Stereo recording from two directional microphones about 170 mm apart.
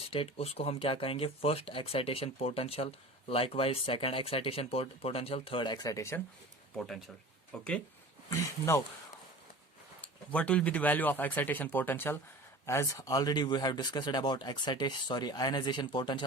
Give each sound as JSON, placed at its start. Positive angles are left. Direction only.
{"t": 0.0, "sound": "speech", "side_deg": 35}
{"t": 7.5, "sound": "speech", "side_deg": 5}
{"t": 8.3, "sound": "speech", "side_deg": 15}
{"t": 10.3, "sound": "speech", "side_deg": 5}